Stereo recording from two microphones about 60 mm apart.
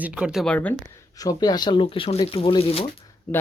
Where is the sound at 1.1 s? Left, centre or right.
Left.